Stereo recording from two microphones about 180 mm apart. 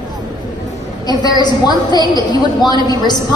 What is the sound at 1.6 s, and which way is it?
A woman's voice, 20° left (ahead or behind).